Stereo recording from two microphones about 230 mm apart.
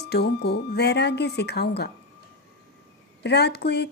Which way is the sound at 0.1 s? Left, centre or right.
Left.